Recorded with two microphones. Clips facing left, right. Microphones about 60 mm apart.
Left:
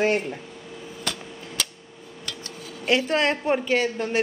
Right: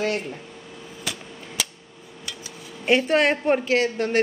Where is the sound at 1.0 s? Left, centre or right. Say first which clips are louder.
Left 1 dB; centre.